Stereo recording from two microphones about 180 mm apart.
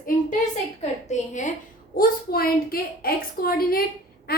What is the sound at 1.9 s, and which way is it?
A woman's voice, 55° left (ahead or behind).